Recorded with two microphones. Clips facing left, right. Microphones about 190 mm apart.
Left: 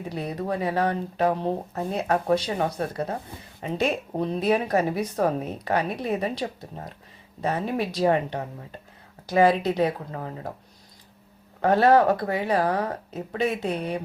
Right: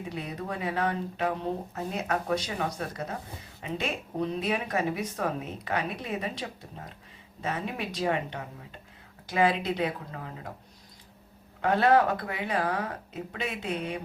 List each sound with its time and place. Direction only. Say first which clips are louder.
0.1 s speech: left 8 dB; 35° left (ahead or behind)
11.6 s speech: left 5 dB; 40° left (ahead or behind)